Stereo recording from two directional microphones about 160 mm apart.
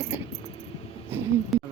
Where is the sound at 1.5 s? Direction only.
Centre (ahead or behind).